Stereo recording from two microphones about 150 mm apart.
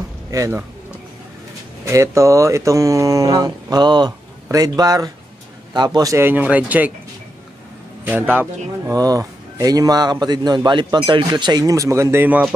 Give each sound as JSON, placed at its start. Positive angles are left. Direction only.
{"t": 0.3, "sound": "speech", "side_deg": -20}
{"t": 1.9, "sound": "speech", "side_deg": -20}
{"t": 8.0, "sound": "speech", "side_deg": -15}
{"t": 8.9, "sound": "speech", "side_deg": -25}